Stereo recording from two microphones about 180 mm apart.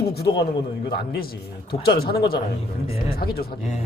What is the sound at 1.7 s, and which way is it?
A man's voice, 60° left (ahead or behind).